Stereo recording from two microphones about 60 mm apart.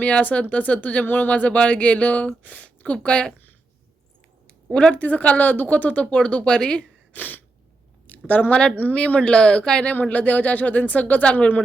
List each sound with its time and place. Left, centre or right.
0.0 s speech: left
4.7 s speech: centre
7.1 s sneeze: left
8.3 s speech: left